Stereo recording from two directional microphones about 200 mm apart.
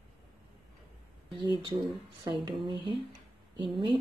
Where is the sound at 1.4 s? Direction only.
20° right (ahead or behind).